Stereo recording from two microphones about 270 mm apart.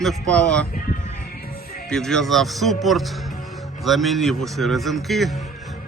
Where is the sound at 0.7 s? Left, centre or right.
Left.